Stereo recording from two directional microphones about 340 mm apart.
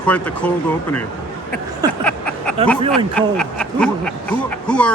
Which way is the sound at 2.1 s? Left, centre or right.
Centre.